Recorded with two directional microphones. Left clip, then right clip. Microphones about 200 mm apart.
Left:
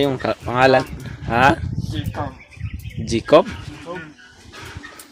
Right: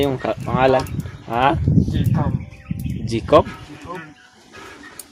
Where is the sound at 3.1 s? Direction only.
10° left (ahead or behind).